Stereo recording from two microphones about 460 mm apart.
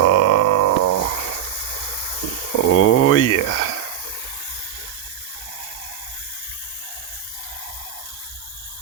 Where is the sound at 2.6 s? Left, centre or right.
Left.